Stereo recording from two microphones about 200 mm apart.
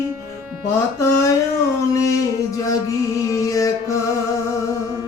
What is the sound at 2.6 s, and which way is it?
Music, 15° left (ahead or behind).